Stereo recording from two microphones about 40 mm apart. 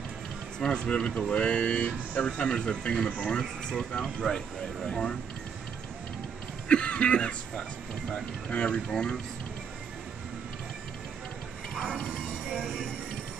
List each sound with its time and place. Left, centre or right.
0.6 s speech: left
4.0 s speech: centre
6.7 s a sound: left
8.5 s speech: left